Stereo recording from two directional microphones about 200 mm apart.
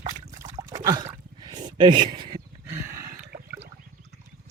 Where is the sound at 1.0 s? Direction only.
20° right (ahead or behind).